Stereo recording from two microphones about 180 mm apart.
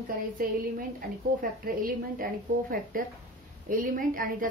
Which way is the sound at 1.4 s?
55° right (ahead or behind).